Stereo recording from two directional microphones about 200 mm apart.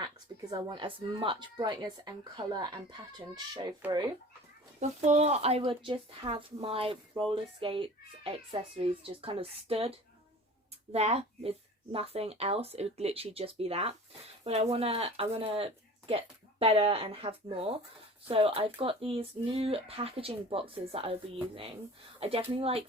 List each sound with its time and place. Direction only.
0.0 s speech: 20° right (ahead or behind)
4.8 s speech: 35° right (ahead or behind)